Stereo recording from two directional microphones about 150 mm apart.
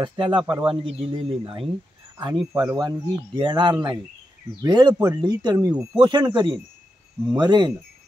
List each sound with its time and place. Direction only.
0.0 s speech: 30° right (ahead or behind)